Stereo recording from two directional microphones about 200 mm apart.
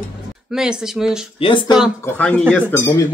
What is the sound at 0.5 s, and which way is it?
Speech, 5° right (ahead or behind).